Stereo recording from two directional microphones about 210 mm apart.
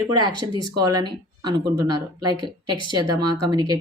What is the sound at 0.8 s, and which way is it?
Speech, 20° right (ahead or behind).